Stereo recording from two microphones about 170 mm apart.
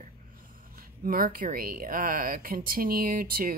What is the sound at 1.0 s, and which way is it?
A woman's voice, 55° right (ahead or behind).